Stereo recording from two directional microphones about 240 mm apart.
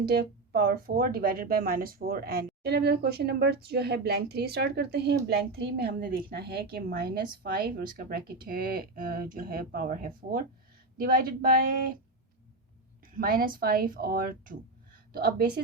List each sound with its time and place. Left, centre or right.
0.0 s speech: right
13.1 s speech: right